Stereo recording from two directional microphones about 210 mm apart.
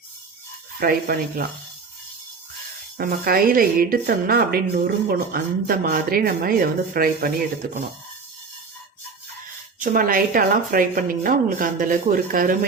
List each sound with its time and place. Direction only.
0.8 s speech: 45° right (ahead or behind)
3.0 s speech: 45° right (ahead or behind)
9.8 s speech: 40° right (ahead or behind)